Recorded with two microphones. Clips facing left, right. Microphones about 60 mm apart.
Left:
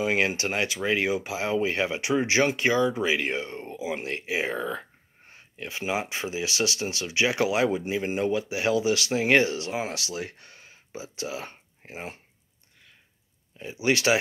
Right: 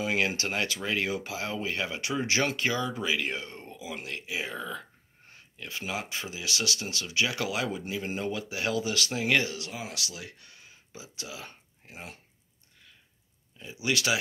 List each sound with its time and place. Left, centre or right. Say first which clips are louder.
0.0 s speech: left 4 dB; left
13.6 s speech: left 5 dB; left